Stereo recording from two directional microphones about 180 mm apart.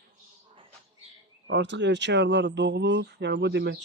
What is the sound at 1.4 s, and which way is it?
Speech, 80° right.